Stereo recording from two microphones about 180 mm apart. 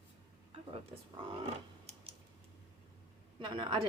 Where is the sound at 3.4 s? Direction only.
25° right (ahead or behind).